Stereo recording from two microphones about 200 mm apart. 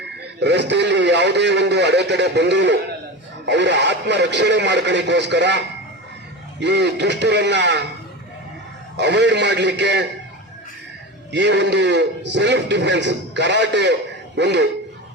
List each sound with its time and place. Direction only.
0.3 s a man's voice: 60° right (ahead or behind)
9.0 s a man's voice: 60° right (ahead or behind)
11.3 s a man's voice: 60° right (ahead or behind)